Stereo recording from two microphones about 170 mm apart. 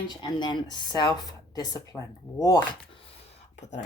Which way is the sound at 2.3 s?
20° left (ahead or behind).